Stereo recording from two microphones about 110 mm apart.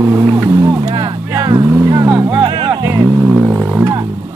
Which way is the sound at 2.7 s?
30° right (ahead or behind).